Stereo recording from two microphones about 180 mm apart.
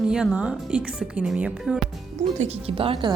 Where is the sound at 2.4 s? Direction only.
35° right (ahead or behind).